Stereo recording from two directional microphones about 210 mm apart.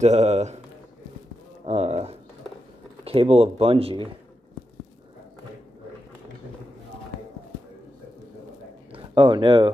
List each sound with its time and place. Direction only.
0.0 s speech: 35° right (ahead or behind)
1.7 s speech: 30° right (ahead or behind)
8.9 s speech: 25° right (ahead or behind)